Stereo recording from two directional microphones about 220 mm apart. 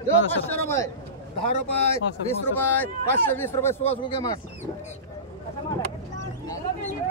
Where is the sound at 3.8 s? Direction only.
25° left (ahead or behind).